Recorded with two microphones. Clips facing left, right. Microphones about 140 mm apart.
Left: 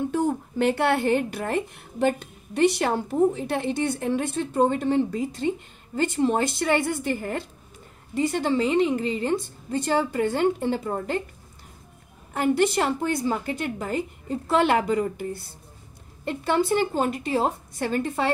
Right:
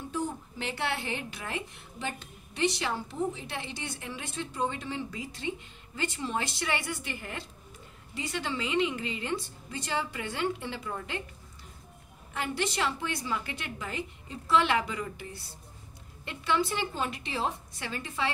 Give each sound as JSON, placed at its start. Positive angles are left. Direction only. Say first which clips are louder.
{"t": 0.1, "sound": "speech", "louder": "left 9 dB", "side_deg": 60}
{"t": 12.4, "sound": "speech", "louder": "left 10 dB", "side_deg": 50}